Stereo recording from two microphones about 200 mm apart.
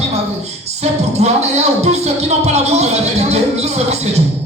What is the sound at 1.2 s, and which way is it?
Speech, 35° right (ahead or behind).